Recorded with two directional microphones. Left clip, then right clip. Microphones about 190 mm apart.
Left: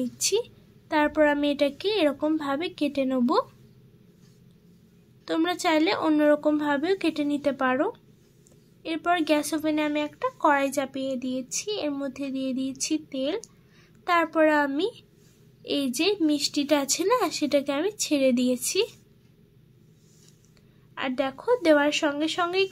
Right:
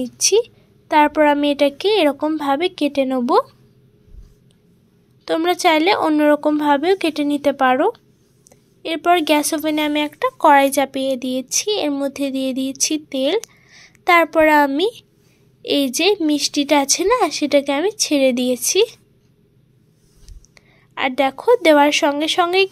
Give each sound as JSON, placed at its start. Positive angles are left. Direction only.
{"t": 0.2, "sound": "speech", "side_deg": -10}
{"t": 5.2, "sound": "speech", "side_deg": -10}
{"t": 20.5, "sound": "a woman's voice", "side_deg": -20}